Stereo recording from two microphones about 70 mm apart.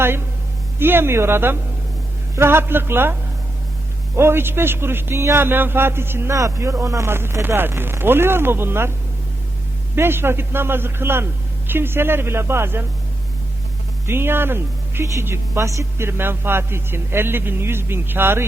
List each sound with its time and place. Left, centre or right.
0.0 s a man's voice: right
6.3 s speech: right
7.1 s a man's voice: right
9.9 s a man's voice: right
14.1 s a man's voice: right
15.6 s a man's voice: right